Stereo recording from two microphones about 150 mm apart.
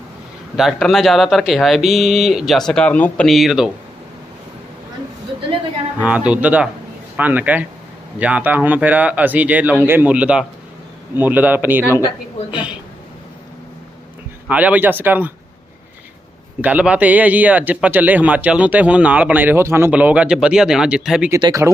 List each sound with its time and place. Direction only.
0.5 s speech: centre (ahead or behind)
6.0 s a man's voice: 10° right (ahead or behind)
14.4 s a man's voice: 10° right (ahead or behind)
16.6 s a man's voice: 10° right (ahead or behind)
21.4 s speech: 20° right (ahead or behind)